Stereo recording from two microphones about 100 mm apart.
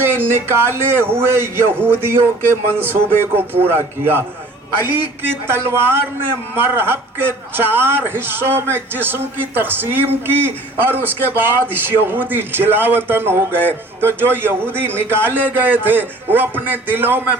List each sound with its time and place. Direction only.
0.0 s a man's voice: 20° right (ahead or behind)